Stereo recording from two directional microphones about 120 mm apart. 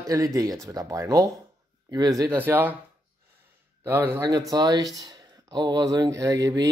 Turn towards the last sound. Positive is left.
turn(degrees=-30)  # may be behind; listen again after turning